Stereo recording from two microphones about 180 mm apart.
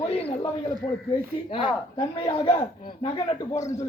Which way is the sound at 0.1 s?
35° left (ahead or behind).